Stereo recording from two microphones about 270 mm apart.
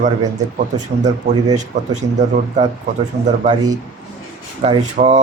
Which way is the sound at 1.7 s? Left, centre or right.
Right.